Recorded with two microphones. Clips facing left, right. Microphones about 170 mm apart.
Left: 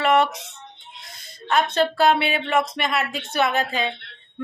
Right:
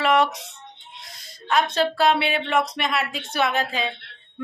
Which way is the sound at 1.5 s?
Centre (ahead or behind).